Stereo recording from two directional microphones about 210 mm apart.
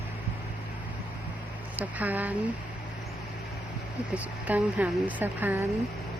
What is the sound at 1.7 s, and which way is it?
Speech, 5° right (ahead or behind).